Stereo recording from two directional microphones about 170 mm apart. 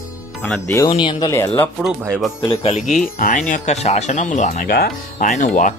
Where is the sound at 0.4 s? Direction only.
10° left (ahead or behind).